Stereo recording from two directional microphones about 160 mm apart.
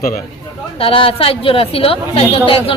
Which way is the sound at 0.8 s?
35° left (ahead or behind).